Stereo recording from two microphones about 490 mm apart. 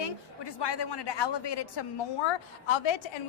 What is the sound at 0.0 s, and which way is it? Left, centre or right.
A woman's voice, left.